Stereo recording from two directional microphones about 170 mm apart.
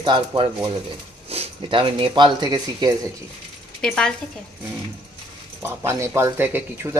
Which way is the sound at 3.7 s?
5° left (ahead or behind).